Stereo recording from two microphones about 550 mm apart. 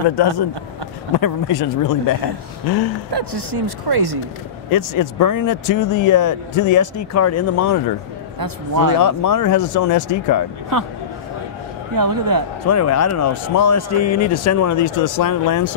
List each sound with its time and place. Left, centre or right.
0.2 s speech: left
3.1 s a woman's voice: right
4.6 s speech: left
8.4 s a man's voice: right
9.0 s speech: left
11.9 s a man's voice: right
12.6 s speech: left